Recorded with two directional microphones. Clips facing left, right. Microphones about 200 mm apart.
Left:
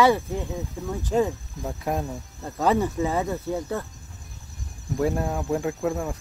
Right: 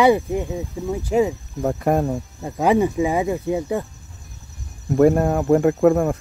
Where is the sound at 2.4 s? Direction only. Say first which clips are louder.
Right 5 dB; 10° right (ahead or behind).